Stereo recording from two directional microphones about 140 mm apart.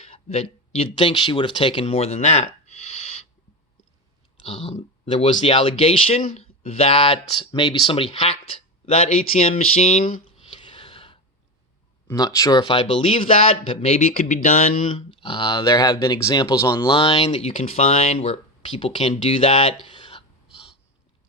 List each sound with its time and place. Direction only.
0.0 s speech: 45° left (ahead or behind)
4.4 s speech: 45° left (ahead or behind)
10.5 s a sound: 35° left (ahead or behind)
12.1 s speech: 25° left (ahead or behind); by 14.9 s 60° left (ahead or behind)
14.9 s speech: 35° left (ahead or behind)
16.8 s speech: 40° left (ahead or behind)
19.8 s a sound: 35° left (ahead or behind)